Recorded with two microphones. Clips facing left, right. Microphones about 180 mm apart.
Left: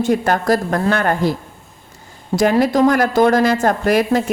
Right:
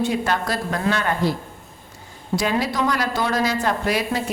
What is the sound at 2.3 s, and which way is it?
Speech, 50° left (ahead or behind).